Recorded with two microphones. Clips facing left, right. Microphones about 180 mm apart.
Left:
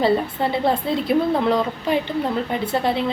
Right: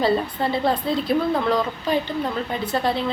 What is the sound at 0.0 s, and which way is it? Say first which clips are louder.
Speech: left 2 dB; 25° left (ahead or behind).